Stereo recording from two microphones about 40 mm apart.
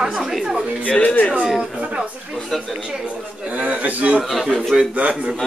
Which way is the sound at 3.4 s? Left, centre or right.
Right.